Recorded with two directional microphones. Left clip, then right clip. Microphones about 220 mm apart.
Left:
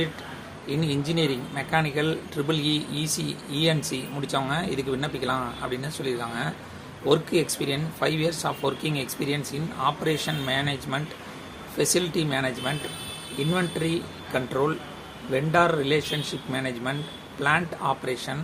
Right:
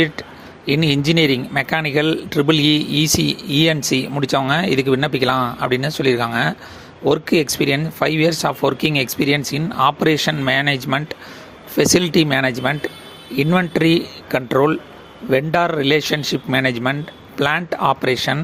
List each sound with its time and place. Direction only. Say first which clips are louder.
0.7 s speech: right 11 dB; 40° right (ahead or behind)